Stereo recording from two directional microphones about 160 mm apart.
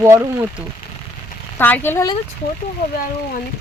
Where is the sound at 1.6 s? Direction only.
15° left (ahead or behind).